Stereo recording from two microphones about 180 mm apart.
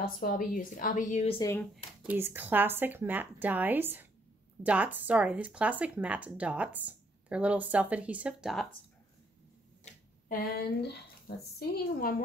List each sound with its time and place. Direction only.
0.0 s a woman's voice: 50° left (ahead or behind)
1.4 s speech: 15° left (ahead or behind)
2.0 s speech: 10° right (ahead or behind)
10.8 s speech: 65° left (ahead or behind)